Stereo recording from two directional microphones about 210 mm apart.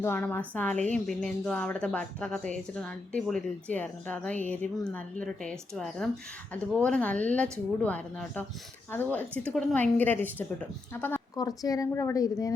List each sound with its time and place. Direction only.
0.0 s a woman's voice: 10° left (ahead or behind)